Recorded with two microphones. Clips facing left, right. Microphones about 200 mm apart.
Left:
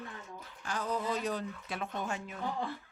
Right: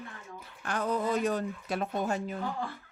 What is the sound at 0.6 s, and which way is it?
Speech, 60° right (ahead or behind).